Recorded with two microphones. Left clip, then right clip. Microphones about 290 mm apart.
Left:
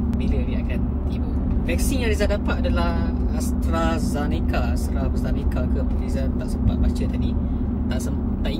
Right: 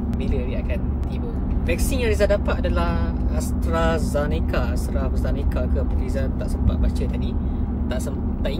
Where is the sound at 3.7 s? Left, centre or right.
Centre.